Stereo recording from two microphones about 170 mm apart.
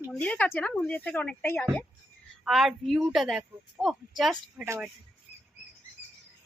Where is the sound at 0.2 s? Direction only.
10° left (ahead or behind).